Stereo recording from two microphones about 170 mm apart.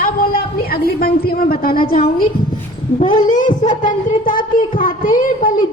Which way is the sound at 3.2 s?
50° left (ahead or behind).